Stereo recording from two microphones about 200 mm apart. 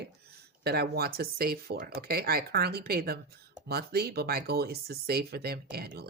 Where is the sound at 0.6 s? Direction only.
50° right (ahead or behind).